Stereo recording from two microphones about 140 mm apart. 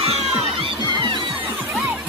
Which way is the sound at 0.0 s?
45° right (ahead or behind).